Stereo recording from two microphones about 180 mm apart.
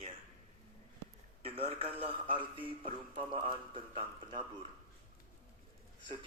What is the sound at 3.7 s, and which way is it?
Speech, 25° right (ahead or behind).